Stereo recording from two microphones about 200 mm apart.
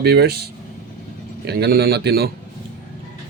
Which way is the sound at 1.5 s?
55° right (ahead or behind).